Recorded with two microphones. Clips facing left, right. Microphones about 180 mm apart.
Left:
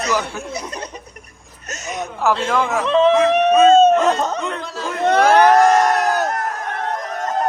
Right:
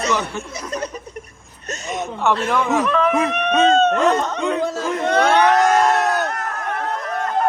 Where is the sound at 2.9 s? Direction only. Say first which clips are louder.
Left 5 dB; 25° left (ahead or behind).